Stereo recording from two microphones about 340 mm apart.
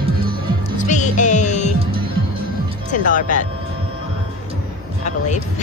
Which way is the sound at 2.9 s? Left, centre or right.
Left.